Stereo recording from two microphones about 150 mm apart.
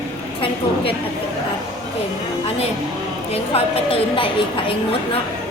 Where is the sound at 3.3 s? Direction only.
40° left (ahead or behind).